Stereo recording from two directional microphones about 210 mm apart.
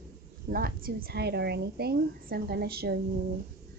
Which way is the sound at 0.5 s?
45° right (ahead or behind).